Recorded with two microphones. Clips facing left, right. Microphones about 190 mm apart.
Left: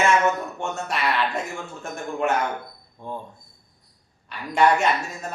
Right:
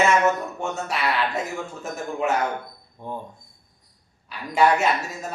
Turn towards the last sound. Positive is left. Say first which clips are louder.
# even
turn(degrees=0)  # may be behind; listen again after turning